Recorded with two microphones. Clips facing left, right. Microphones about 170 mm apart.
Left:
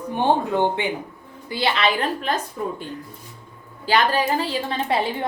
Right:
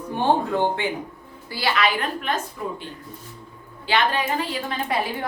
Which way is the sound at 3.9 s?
35° left (ahead or behind).